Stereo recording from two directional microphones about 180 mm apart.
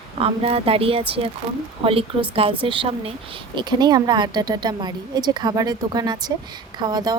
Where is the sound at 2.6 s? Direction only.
30° right (ahead or behind).